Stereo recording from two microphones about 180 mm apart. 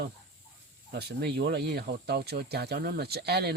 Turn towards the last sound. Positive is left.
turn(degrees=-65)  # may be behind; listen again after turning